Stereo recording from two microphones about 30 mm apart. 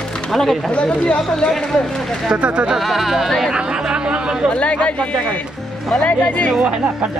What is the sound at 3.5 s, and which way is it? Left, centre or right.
Chatter, right.